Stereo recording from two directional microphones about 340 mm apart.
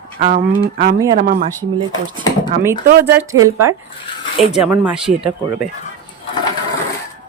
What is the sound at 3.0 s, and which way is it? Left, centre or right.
Speech, centre.